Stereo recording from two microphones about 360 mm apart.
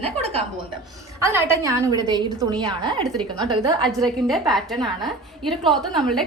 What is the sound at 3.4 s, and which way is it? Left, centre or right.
Speech, centre.